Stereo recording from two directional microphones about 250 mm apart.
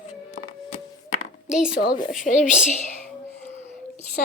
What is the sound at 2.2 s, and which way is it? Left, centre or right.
Speech, left.